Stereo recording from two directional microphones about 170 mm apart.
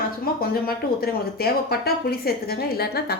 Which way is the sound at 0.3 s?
60° left (ahead or behind).